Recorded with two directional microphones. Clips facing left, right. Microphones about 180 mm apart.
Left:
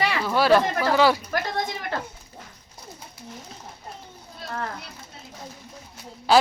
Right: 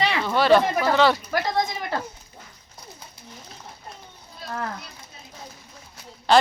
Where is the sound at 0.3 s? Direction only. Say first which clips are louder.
Right 1 dB; 5° left (ahead or behind).